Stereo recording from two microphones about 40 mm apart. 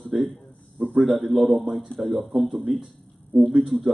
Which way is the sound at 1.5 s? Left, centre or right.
Centre.